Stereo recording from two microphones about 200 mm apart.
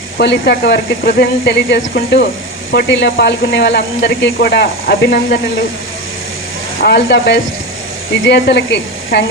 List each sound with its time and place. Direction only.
0.2 s speech: 55° left (ahead or behind)
6.8 s speech: 55° left (ahead or behind)